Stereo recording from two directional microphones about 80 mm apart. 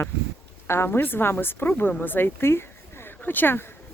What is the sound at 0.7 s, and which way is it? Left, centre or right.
A woman's voice, left.